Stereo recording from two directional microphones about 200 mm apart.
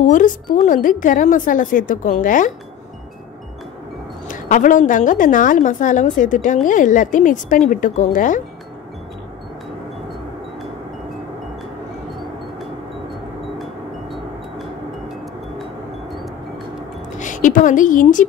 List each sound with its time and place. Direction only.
0.0 s a woman's voice: 40° left (ahead or behind)
4.3 s a woman's voice: 40° left (ahead or behind)
17.2 s a woman's voice: 40° left (ahead or behind)